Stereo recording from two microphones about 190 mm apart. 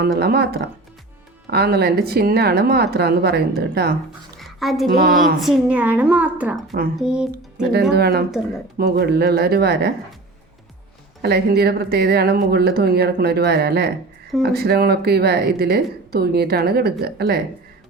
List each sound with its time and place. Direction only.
0.0 s a woman's voice: 55° right (ahead or behind)
4.4 s music: centre (ahead or behind)
4.9 s a woman's voice: 50° right (ahead or behind)
5.4 s a woman's voice: 5° right (ahead or behind)
6.7 s a woman's voice: 50° right (ahead or behind)
6.9 s speech: 5° right (ahead or behind)
7.9 s a woman's voice: 55° right (ahead or behind)
11.2 s a woman's voice: 60° right (ahead or behind)